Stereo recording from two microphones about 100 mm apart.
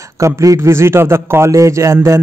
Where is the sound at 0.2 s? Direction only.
35° right (ahead or behind).